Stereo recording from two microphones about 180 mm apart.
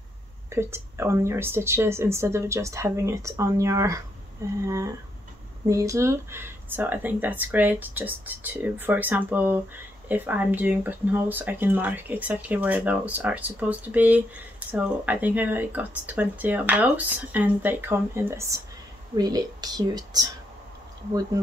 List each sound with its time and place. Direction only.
0.5 s speech: 15° right (ahead or behind)